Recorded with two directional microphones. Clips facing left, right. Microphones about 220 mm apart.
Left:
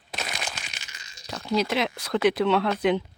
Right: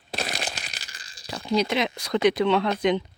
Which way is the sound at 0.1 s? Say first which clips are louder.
Right 3 dB; 35° right (ahead or behind).